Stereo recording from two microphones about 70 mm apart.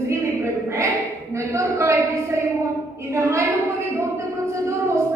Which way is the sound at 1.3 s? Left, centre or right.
Right.